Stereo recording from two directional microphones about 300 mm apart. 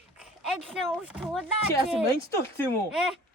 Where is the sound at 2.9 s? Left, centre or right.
Centre.